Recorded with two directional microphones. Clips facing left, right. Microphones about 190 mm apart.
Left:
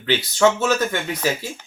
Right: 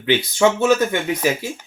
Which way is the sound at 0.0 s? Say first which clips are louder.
Right 1 dB; 15° right (ahead or behind).